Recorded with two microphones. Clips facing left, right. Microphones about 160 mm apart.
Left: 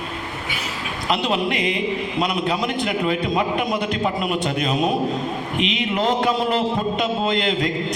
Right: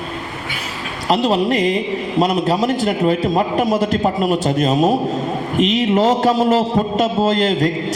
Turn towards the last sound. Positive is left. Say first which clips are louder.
# right 5 dB
turn(degrees=-40)  # may be behind; listen again after turning